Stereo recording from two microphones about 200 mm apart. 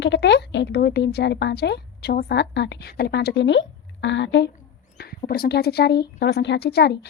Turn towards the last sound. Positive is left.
turn(degrees=55)  # may be behind; listen again after turning